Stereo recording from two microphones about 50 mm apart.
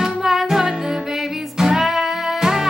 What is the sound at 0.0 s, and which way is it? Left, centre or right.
Music, centre.